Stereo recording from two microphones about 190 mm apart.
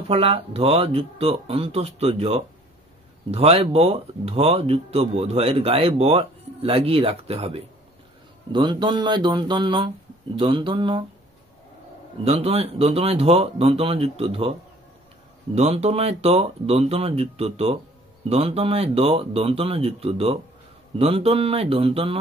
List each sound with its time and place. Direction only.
0.1 s speech: 30° right (ahead or behind)
12.3 s speech: 35° right (ahead or behind)
15.5 s speech: 35° right (ahead or behind)